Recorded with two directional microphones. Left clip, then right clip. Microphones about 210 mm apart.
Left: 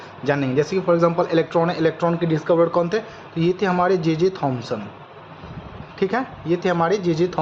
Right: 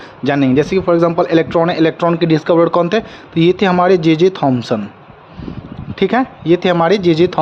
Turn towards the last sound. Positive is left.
turn(degrees=-45)  # may be behind; listen again after turning